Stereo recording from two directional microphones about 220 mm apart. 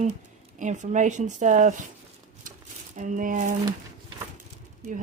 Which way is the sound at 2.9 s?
35° right (ahead or behind).